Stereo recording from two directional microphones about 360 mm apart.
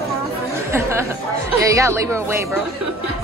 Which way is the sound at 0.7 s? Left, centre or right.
Centre.